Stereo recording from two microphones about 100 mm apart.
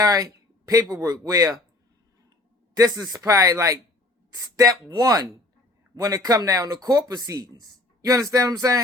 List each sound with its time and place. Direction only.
0.0 s a sound: 35° right (ahead or behind)
1.0 s speech: 40° right (ahead or behind)
2.7 s speech: 40° right (ahead or behind)